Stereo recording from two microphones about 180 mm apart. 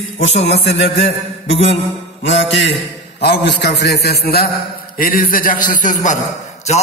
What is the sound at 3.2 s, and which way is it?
A man's voice, 70° left (ahead or behind).